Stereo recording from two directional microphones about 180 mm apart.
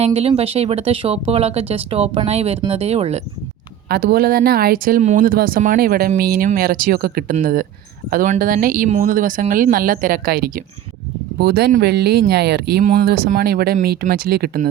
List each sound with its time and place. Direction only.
0.0 s speech: 35° right (ahead or behind)
3.8 s speech: 60° right (ahead or behind)
12.8 s speech: 55° right (ahead or behind)